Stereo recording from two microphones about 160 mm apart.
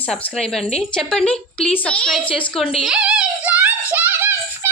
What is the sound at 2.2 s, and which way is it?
Speech, 30° left (ahead or behind).